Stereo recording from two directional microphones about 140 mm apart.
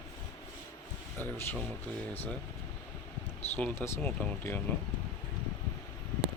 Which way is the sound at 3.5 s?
15° left (ahead or behind).